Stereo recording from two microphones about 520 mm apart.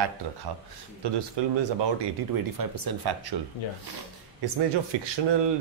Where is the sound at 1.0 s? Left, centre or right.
Right.